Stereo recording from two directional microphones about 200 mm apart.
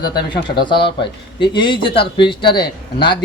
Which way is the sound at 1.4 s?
25° left (ahead or behind).